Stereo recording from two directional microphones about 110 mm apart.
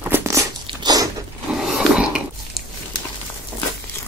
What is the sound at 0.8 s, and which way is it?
Crunch, 35° right (ahead or behind).